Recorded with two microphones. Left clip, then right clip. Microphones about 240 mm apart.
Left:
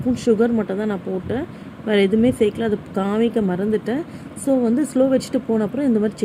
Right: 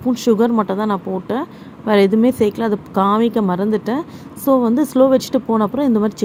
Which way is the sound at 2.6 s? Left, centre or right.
Right.